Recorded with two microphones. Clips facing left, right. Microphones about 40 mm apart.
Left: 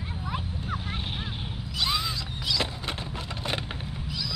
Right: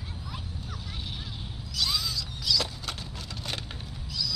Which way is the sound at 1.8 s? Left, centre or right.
Left.